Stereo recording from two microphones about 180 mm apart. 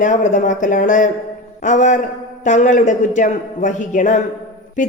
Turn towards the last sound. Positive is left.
turn(degrees=45)  # may be behind; listen again after turning